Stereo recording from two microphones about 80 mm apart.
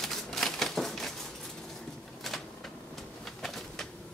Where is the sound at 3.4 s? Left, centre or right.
Centre.